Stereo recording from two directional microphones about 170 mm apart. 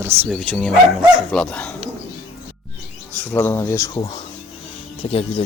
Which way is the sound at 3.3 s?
15° left (ahead or behind).